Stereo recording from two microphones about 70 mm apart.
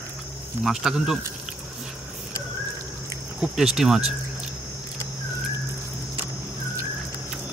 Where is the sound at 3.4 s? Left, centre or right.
Centre.